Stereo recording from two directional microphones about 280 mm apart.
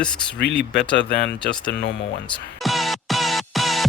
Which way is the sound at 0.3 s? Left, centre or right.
Left.